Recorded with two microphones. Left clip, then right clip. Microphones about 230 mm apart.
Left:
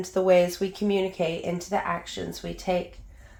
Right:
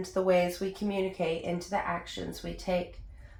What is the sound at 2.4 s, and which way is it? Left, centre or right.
Speech, left.